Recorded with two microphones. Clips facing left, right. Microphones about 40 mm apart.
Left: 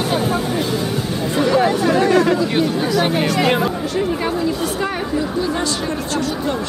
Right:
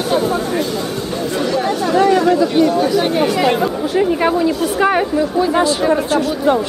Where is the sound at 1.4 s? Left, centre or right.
Centre.